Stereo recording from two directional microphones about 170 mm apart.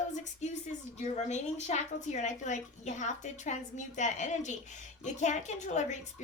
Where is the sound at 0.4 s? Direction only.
45° left (ahead or behind).